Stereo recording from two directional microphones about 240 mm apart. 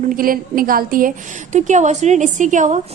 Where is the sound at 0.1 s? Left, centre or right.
Right.